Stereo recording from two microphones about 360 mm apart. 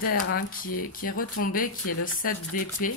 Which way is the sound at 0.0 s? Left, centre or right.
Left.